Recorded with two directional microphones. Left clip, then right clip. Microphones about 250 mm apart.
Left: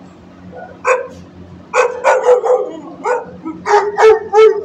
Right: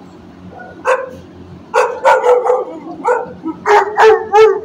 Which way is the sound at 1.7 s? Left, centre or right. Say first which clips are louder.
Right 1 dB; left.